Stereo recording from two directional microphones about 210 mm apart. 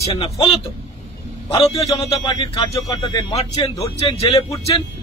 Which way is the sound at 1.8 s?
25° left (ahead or behind).